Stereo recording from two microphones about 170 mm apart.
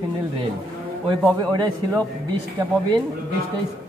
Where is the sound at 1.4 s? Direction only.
25° right (ahead or behind).